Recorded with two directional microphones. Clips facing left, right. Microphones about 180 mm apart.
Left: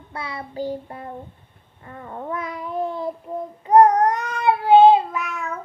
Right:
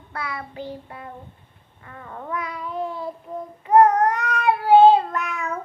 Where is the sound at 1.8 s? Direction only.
30° left (ahead or behind).